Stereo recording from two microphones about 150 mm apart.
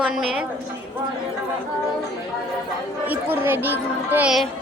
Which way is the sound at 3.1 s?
15° right (ahead or behind).